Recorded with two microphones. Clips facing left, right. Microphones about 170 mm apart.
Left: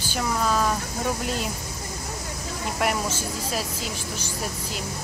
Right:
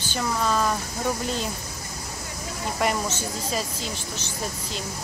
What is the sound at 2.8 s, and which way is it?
Speech, 5° left (ahead or behind).